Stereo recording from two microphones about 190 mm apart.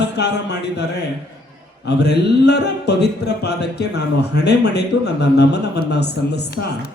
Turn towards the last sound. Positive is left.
turn(degrees=60)  # may be behind; listen again after turning